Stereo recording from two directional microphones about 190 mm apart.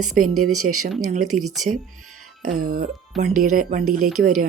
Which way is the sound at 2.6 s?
50° right (ahead or behind).